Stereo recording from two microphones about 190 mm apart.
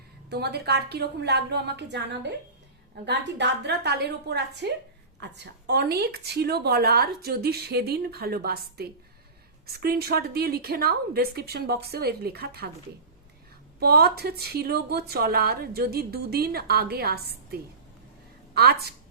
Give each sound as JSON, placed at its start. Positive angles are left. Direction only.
{"t": 0.3, "sound": "speech", "side_deg": -60}
{"t": 13.7, "sound": "speech", "side_deg": -55}